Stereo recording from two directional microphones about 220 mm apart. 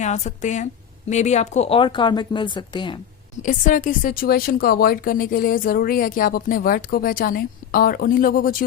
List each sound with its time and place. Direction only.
0.0 s a woman's voice: 30° left (ahead or behind)
3.4 s a woman's voice: 35° left (ahead or behind)